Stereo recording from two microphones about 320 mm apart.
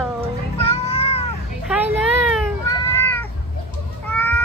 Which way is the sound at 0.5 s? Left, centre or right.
Centre.